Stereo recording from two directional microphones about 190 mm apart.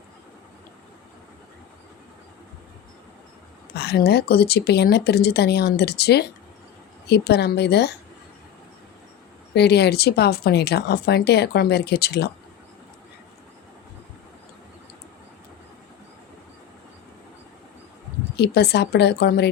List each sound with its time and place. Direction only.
3.8 s speech: 60° left (ahead or behind)
9.6 s speech: 60° left (ahead or behind)
18.3 s speech: 60° left (ahead or behind)